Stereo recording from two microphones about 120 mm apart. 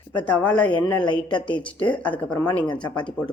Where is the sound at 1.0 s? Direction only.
40° left (ahead or behind).